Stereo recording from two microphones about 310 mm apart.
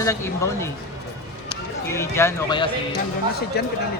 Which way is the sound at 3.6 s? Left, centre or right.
Left.